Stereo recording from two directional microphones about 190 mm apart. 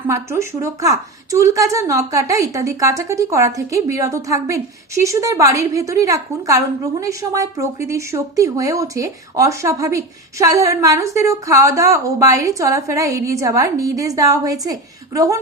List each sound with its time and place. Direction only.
0.1 s speech: 15° right (ahead or behind)